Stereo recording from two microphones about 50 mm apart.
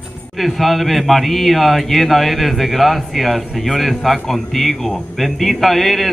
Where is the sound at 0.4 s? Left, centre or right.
Centre.